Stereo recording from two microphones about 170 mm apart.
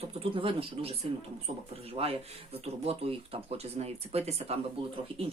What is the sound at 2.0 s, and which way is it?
Speech, 35° right (ahead or behind).